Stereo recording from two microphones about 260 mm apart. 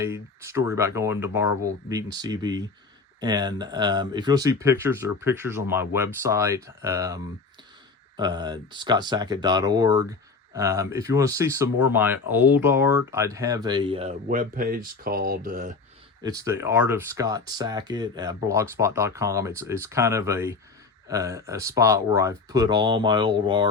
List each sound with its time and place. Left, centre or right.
0.0 s speech: centre; by 15.7 s right
16.2 s speech: centre